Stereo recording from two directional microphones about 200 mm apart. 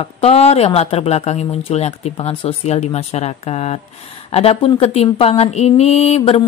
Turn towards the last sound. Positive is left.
turn(degrees=30)  # may be behind; listen again after turning